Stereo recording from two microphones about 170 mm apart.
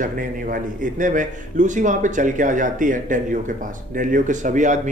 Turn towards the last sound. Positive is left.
turn(degrees=-45)  # may be behind; listen again after turning